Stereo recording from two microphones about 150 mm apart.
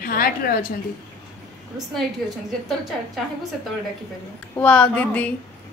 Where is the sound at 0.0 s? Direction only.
75° left (ahead or behind).